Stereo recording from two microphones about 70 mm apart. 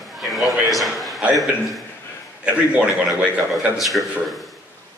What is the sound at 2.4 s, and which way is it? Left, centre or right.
Speech, centre.